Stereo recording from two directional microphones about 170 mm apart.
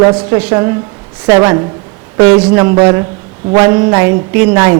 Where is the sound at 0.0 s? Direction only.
20° right (ahead or behind).